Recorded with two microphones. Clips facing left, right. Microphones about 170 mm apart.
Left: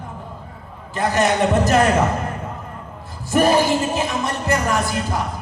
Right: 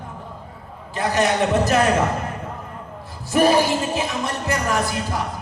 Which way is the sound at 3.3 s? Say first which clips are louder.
Left 1 dB; 50° left (ahead or behind).